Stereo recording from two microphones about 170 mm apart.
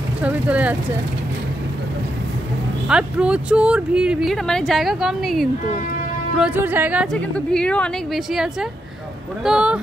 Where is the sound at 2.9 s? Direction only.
5° right (ahead or behind).